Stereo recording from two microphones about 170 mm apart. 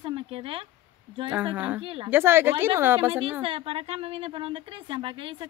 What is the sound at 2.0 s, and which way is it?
A woman's voice, 10° right (ahead or behind).